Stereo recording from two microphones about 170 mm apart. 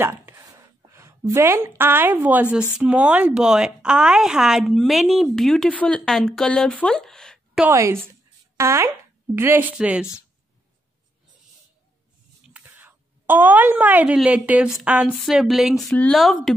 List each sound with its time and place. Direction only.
0.0 s a sound: 15° right (ahead or behind)
2.8 s a woman's voice: 5° right (ahead or behind)
7.6 s a woman's voice: 15° right (ahead or behind)
12.4 s a woman's voice: 10° right (ahead or behind)